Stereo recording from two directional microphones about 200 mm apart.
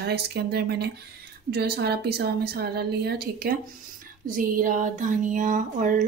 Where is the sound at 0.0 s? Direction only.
55° right (ahead or behind).